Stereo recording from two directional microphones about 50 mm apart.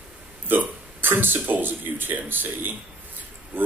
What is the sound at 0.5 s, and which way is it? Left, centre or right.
A man's voice, right.